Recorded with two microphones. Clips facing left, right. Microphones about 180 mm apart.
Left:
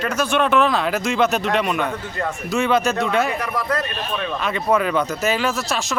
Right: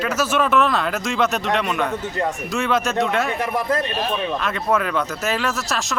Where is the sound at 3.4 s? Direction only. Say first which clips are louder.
Right 2 dB; 25° right (ahead or behind).